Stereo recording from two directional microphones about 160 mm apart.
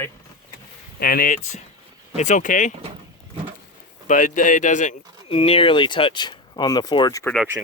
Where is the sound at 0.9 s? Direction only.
65° left (ahead or behind).